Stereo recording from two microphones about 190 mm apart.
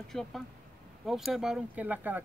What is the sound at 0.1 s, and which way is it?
Speech, centre (ahead or behind).